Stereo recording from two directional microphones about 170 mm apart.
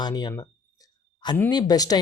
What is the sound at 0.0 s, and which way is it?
Speech, 25° left (ahead or behind).